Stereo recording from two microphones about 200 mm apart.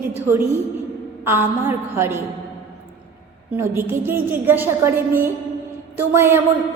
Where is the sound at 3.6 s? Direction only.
10° right (ahead or behind).